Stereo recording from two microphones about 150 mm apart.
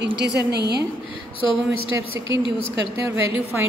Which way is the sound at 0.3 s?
90° right.